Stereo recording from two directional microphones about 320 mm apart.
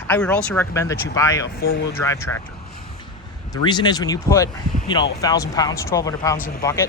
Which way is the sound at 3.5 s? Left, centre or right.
Centre.